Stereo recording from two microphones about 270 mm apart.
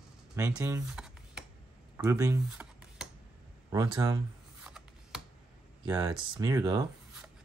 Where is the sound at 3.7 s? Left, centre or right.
Centre.